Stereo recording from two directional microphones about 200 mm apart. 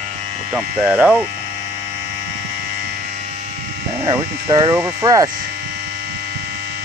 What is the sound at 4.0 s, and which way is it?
Speech, 20° right (ahead or behind).